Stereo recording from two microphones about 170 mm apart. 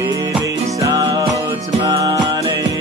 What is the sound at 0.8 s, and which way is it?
Music, 20° right (ahead or behind).